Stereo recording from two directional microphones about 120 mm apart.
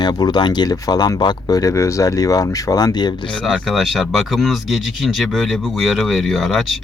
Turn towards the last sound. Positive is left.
turn(degrees=0)  # may be behind; listen again after turning